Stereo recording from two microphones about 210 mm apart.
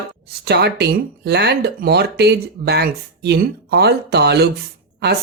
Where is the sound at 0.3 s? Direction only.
50° right (ahead or behind).